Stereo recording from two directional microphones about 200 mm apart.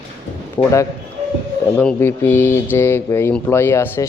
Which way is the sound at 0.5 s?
15° left (ahead or behind).